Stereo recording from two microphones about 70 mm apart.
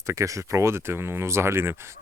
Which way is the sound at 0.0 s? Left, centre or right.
Right.